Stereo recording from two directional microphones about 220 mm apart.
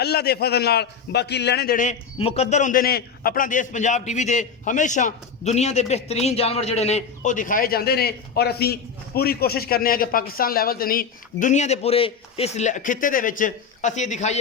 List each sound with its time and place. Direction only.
0.0 s a man's voice: 45° left (ahead or behind)